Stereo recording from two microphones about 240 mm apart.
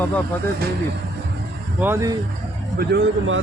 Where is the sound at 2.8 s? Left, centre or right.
Right.